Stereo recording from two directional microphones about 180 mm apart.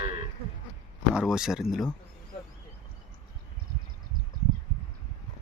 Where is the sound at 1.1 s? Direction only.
5° right (ahead or behind).